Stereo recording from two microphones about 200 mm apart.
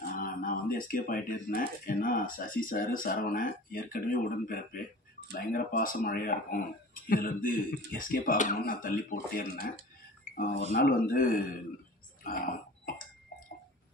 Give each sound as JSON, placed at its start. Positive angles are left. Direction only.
{"t": 0.1, "sound": "speech", "side_deg": 45}
{"t": 10.7, "sound": "speech", "side_deg": 45}
{"t": 12.2, "sound": "a sound", "side_deg": 45}